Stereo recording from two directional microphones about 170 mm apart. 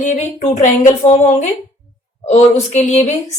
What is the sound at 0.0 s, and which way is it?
A woman's voice, 50° left (ahead or behind).